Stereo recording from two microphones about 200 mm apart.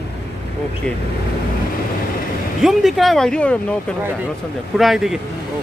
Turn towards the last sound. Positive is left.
turn(degrees=0)  # may be behind; listen again after turning